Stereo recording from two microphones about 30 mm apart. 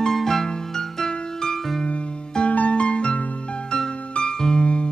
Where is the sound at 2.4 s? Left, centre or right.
Left.